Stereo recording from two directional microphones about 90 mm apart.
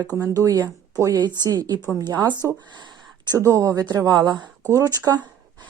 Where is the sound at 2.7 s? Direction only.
55° right (ahead or behind).